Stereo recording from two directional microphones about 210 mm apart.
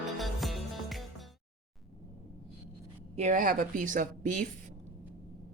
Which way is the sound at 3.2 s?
35° right (ahead or behind).